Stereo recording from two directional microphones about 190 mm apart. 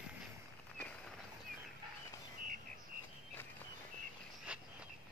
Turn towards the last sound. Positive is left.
turn(degrees=-5)  # may be behind; listen again after turning